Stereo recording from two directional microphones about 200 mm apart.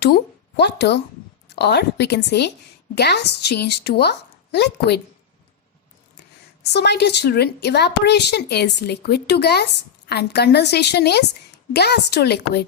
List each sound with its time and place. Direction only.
0.0 s a woman's voice: 60° left (ahead or behind)
6.6 s a woman's voice: 55° left (ahead or behind)